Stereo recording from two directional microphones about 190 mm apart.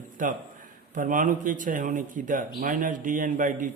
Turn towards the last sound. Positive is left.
turn(degrees=-45)  # may be behind; listen again after turning